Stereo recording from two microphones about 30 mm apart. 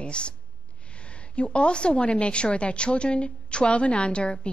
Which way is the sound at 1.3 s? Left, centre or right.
Left.